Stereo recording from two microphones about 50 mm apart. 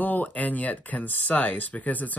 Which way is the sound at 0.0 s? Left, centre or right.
Left.